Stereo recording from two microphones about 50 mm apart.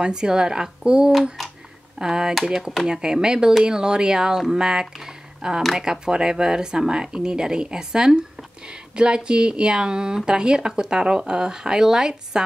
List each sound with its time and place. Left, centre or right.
0.0 s speech: centre